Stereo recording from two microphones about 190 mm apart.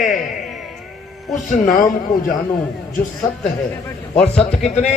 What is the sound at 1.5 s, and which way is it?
Speech, 45° left (ahead or behind).